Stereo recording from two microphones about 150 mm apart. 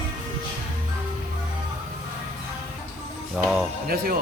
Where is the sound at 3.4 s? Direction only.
Centre (ahead or behind).